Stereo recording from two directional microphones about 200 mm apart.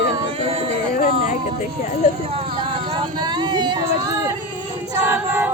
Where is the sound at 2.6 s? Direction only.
20° right (ahead or behind).